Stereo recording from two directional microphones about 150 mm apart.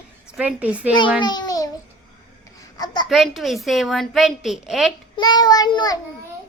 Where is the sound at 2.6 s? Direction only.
25° left (ahead or behind).